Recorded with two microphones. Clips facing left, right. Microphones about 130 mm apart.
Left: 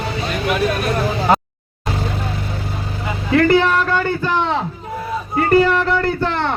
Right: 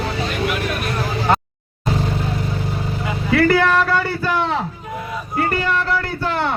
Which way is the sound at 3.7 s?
5° right (ahead or behind).